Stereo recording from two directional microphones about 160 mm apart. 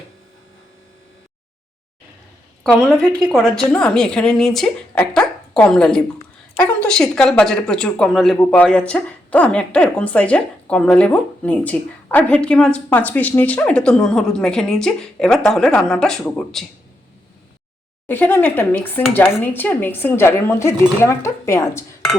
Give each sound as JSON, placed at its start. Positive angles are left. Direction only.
{"t": 2.9, "sound": "speech", "side_deg": 5}
{"t": 18.1, "sound": "speech", "side_deg": 15}